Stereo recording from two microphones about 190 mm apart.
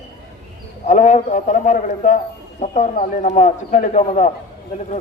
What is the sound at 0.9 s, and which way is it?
A man's voice, 40° left (ahead or behind).